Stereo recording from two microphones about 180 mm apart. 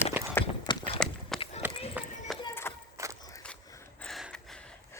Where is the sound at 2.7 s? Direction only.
15° left (ahead or behind).